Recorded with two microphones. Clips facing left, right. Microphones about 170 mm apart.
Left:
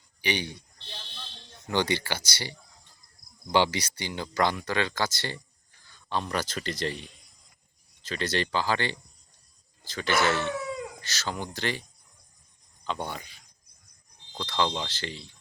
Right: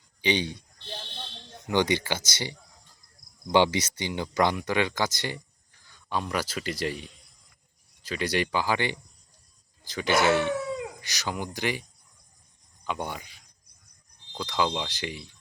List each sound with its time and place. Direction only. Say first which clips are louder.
0.2 s speech: right 4 dB; 20° right (ahead or behind)
1.6 s speech: right 2 dB; 15° right (ahead or behind)
8.0 s speech: right 2 dB; 10° right (ahead or behind)